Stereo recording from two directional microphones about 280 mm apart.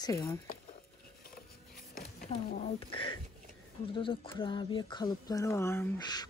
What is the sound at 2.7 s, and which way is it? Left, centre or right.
Speech, centre.